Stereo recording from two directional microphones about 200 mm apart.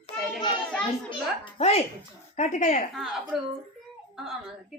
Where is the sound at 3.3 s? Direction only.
Centre (ahead or behind).